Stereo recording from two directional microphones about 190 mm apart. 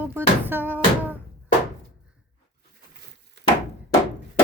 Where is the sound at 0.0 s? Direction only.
10° right (ahead or behind).